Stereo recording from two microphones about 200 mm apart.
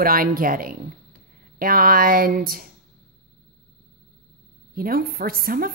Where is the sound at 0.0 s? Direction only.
45° right (ahead or behind).